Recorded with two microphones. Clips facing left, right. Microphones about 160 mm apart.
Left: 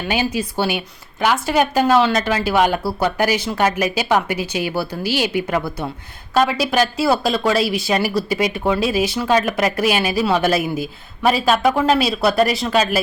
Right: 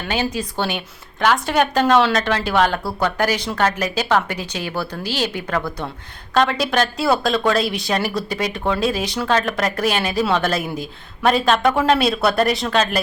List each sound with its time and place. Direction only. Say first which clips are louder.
0.1 s speech: left 1 dB; 10° left (ahead or behind)